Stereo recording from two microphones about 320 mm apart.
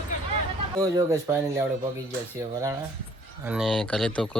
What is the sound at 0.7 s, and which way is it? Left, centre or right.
Speech, centre.